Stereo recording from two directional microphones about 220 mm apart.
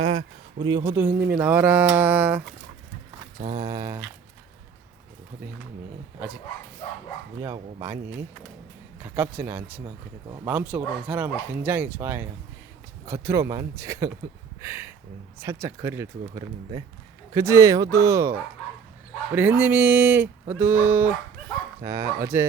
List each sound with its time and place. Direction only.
0.6 s speech: 20° right (ahead or behind)
2.0 s a sound: 5° right (ahead or behind)
3.3 s mantra: 35° right (ahead or behind)
3.6 s speech: 15° right (ahead or behind)
7.4 s speech: 15° right (ahead or behind)
9.0 s speech: 10° right (ahead or behind)